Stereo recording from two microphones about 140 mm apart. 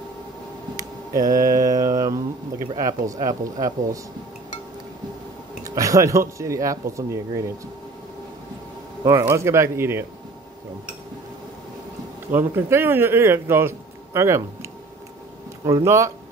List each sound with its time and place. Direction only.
0.7 s mantra: 25° right (ahead or behind)
5.6 s mantra: 25° right (ahead or behind)
9.0 s mantra: 20° right (ahead or behind)
12.3 s speech: 15° right (ahead or behind)
15.6 s mantra: 25° right (ahead or behind)